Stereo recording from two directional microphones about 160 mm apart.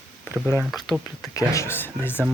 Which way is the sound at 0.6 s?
Centre (ahead or behind).